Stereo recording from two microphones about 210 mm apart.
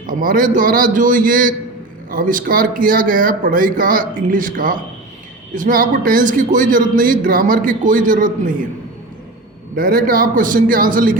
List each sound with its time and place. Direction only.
0.1 s a man's voice: 40° right (ahead or behind)
9.7 s a man's voice: 45° right (ahead or behind)